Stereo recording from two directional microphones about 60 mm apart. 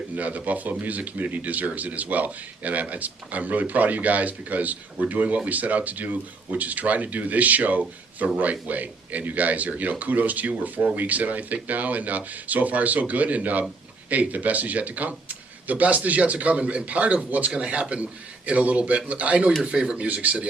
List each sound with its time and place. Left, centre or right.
0.2 s speech: right